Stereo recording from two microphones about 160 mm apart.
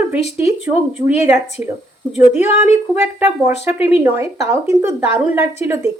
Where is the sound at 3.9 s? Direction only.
15° right (ahead or behind).